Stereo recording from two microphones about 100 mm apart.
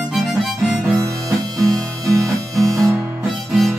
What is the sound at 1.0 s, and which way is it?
Harmonica, 35° right (ahead or behind).